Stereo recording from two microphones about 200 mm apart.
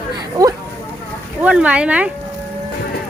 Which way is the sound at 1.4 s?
5° right (ahead or behind).